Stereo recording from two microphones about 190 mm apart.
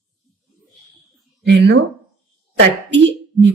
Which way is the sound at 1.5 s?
65° right (ahead or behind).